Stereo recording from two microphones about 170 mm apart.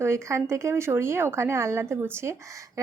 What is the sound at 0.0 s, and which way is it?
Speech, 15° right (ahead or behind).